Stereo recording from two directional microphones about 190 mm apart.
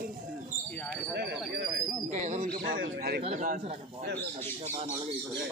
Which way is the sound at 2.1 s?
40° right (ahead or behind).